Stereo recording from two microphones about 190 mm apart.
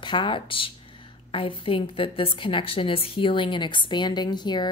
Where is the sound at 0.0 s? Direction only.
25° left (ahead or behind).